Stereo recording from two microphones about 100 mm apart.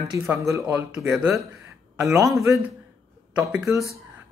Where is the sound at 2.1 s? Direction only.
35° right (ahead or behind).